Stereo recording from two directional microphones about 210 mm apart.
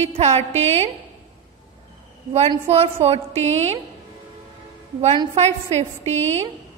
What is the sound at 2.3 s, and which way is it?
A woman's voice, 30° right (ahead or behind).